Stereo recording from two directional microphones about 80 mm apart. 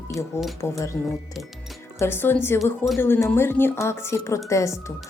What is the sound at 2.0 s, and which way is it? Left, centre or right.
Speech, left.